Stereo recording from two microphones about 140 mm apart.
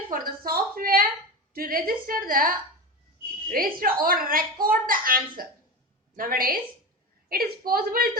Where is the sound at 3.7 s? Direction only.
90° right.